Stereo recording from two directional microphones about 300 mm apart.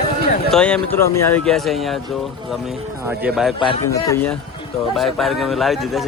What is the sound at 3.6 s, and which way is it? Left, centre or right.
Speech, centre.